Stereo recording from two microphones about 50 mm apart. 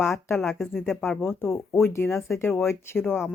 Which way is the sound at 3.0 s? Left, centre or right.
Left.